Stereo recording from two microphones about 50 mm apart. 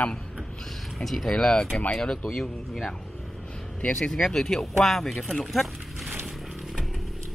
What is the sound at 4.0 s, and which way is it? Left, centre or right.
Speech, centre.